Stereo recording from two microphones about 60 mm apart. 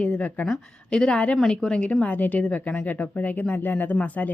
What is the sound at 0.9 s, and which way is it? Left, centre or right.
A woman's voice, centre.